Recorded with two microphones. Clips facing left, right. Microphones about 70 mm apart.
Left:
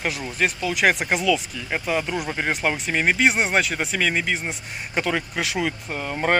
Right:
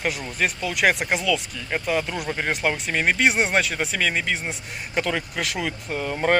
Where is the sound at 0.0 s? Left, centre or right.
Centre.